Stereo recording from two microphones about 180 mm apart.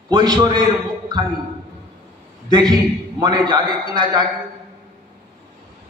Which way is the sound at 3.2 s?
25° right (ahead or behind).